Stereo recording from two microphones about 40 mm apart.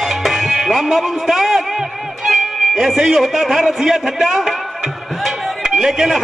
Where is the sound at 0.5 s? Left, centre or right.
Centre.